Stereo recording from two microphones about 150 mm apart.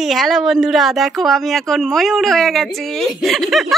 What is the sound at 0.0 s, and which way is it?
A woman's voice, centre (ahead or behind).